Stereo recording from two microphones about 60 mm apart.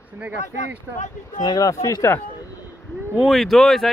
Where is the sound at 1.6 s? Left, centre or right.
Left.